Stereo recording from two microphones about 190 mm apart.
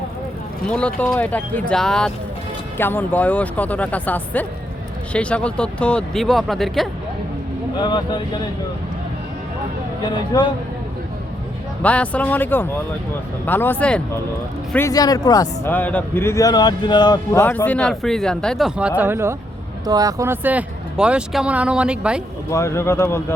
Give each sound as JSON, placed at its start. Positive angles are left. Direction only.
{"t": 0.7, "sound": "speech", "side_deg": 5}
{"t": 7.8, "sound": "a man's voice", "side_deg": 25}
{"t": 10.0, "sound": "a man's voice", "side_deg": 25}
{"t": 11.8, "sound": "a man's voice", "side_deg": 5}
{"t": 17.4, "sound": "speech", "side_deg": 10}
{"t": 22.4, "sound": "speech", "side_deg": 15}